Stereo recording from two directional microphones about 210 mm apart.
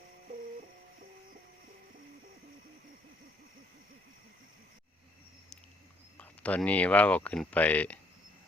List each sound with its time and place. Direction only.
6.1 s speech: 5° left (ahead or behind)